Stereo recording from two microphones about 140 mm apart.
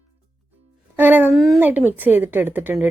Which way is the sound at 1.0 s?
15° right (ahead or behind).